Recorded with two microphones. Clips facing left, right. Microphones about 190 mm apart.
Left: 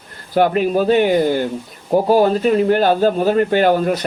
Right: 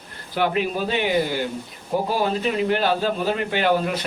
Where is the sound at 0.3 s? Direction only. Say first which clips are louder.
Left 8 dB; 45° left (ahead or behind).